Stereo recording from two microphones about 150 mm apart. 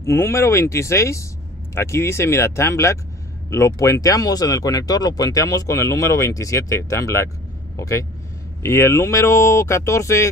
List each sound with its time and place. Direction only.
0.0 s speech: 20° left (ahead or behind)